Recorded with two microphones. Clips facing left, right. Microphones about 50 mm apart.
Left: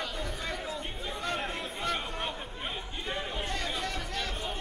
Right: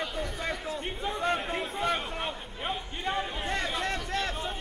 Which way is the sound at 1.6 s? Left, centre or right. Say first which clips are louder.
Right 4 dB; centre.